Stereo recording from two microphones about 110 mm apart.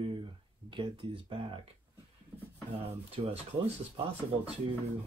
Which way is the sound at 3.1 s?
65° right (ahead or behind).